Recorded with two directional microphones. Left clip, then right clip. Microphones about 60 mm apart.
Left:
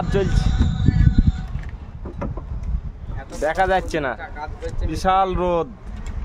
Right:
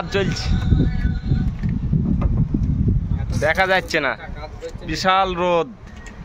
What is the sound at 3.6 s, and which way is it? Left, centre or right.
Speech, right.